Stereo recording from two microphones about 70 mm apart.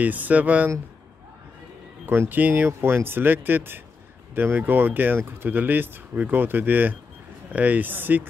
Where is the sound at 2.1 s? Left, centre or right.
Right.